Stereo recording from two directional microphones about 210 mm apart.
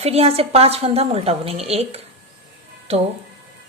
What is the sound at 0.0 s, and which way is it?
A woman's voice, 30° right (ahead or behind).